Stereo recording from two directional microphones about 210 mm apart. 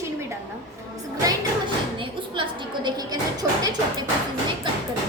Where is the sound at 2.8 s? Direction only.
20° right (ahead or behind).